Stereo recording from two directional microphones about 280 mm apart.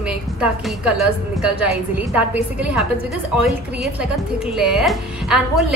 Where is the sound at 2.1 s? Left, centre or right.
Centre.